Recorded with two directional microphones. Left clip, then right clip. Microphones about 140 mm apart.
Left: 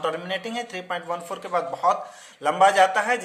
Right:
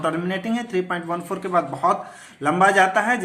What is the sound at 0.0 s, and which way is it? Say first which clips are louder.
A woman's voice: right 3 dB; 20° left (ahead or behind).